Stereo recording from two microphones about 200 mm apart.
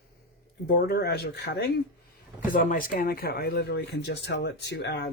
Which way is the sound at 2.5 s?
45° left (ahead or behind).